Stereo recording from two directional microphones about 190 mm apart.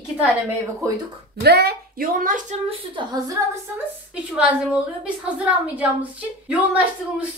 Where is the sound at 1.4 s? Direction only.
60° right (ahead or behind); by 2.6 s 45° right (ahead or behind).